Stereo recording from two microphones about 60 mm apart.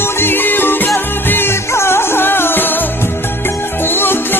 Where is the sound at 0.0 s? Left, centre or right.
Left.